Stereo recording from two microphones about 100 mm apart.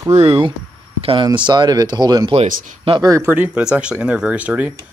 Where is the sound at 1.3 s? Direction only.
50° right (ahead or behind).